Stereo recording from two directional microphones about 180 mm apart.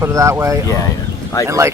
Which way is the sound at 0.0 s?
15° right (ahead or behind).